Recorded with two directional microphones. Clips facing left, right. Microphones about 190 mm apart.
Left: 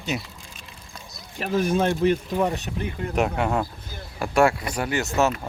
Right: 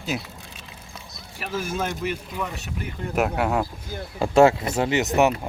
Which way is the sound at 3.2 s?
5° right (ahead or behind).